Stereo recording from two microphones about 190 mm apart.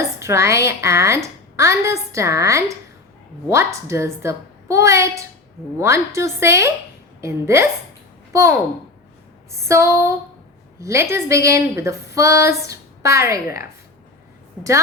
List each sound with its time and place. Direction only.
0.0 s speech: 15° right (ahead or behind)